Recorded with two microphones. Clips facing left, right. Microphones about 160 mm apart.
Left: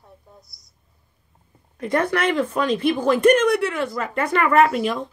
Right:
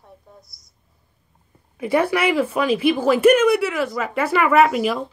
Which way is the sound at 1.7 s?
5° right (ahead or behind).